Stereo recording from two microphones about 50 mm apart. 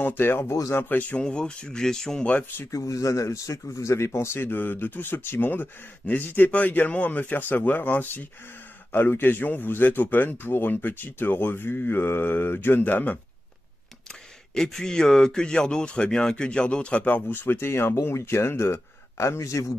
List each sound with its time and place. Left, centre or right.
0.2 s speech: left
0.7 s speech: left
1.1 s speech: centre
2.7 s speech: left
8.9 s speech: left
14.5 s speech: centre; by 17.2 s left
17.3 s speech: left